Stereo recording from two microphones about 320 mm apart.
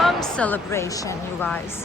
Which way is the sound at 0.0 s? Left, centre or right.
Centre.